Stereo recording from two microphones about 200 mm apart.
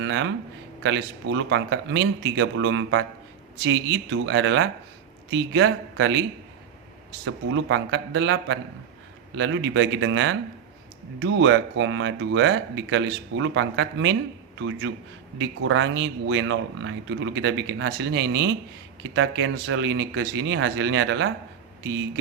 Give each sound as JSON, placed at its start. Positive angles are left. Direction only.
{"t": 0.0, "sound": "a sound", "side_deg": -65}
{"t": 0.8, "sound": "speech", "side_deg": -65}
{"t": 7.3, "sound": "speech", "side_deg": -70}